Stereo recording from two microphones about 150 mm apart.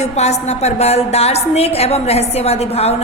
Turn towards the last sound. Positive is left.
turn(degrees=45)  # may be behind; listen again after turning